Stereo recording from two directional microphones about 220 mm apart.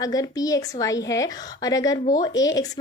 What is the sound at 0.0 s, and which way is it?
A woman's voice, 15° left (ahead or behind).